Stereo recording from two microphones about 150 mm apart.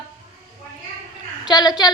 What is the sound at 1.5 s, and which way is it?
Speech, 25° left (ahead or behind).